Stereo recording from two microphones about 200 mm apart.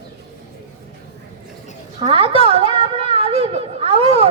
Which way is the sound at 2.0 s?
30° right (ahead or behind).